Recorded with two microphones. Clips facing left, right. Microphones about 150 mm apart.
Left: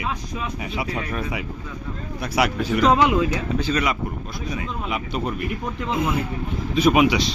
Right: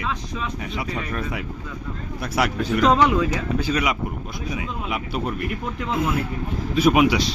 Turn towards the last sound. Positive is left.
turn(degrees=0)  # may be behind; listen again after turning